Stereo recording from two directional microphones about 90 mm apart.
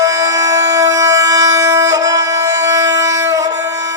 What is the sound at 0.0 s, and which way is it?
Music, 40° right (ahead or behind).